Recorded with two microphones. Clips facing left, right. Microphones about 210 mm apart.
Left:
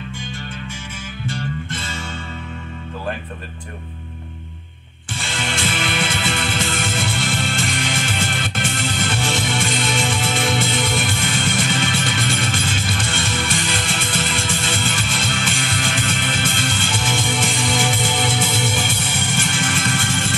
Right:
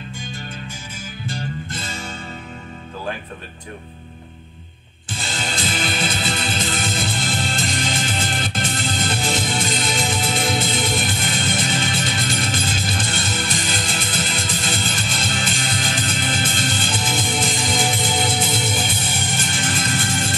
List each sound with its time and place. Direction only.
1.2 s music: 40° right (ahead or behind)
5.2 s music: 35° right (ahead or behind)